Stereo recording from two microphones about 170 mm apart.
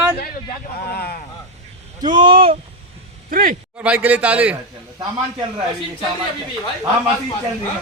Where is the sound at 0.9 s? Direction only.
65° left (ahead or behind).